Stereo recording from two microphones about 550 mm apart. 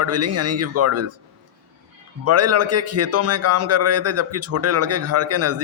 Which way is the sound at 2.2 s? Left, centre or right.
Right.